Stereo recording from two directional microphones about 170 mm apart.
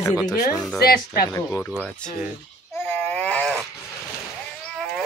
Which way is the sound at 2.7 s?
15° left (ahead or behind).